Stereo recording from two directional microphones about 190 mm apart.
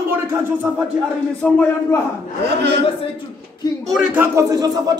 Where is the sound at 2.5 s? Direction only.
60° right (ahead or behind).